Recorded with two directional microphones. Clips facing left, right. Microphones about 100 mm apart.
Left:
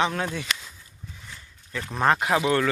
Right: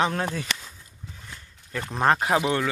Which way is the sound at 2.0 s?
30° right (ahead or behind).